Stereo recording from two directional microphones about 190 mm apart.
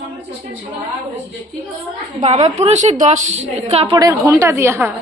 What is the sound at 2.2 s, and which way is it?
A woman's voice, 35° right (ahead or behind).